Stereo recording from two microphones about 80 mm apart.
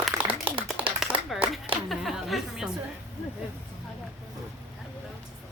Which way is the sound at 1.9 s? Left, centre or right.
Centre.